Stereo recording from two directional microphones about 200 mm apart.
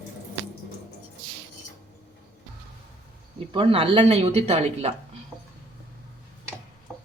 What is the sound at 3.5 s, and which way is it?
Speech, 25° right (ahead or behind).